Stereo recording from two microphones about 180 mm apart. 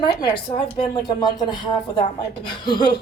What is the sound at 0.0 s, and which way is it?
A woman's voice, 25° left (ahead or behind).